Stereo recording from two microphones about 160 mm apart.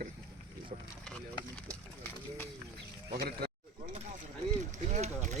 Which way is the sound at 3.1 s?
85° right.